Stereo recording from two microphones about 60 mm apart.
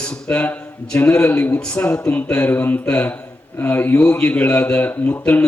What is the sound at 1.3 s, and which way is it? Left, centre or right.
A man's voice, left.